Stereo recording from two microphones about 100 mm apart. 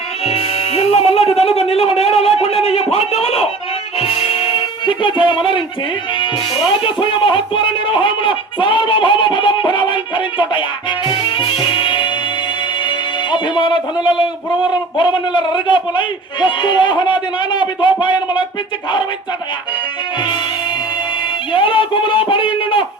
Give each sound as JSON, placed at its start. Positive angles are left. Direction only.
{"t": 0.3, "sound": "music", "side_deg": 90}
{"t": 6.1, "sound": "speech", "side_deg": 55}
{"t": 11.1, "sound": "music", "side_deg": 55}
{"t": 14.7, "sound": "a man's voice", "side_deg": 50}
{"t": 20.1, "sound": "music", "side_deg": 50}
{"t": 21.5, "sound": "speech", "side_deg": 60}